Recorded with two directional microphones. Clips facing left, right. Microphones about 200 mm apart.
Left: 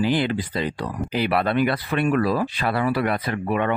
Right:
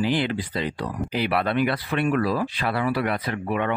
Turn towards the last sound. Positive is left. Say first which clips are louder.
# left 2 dB
turn(degrees=45)  # may be behind; listen again after turning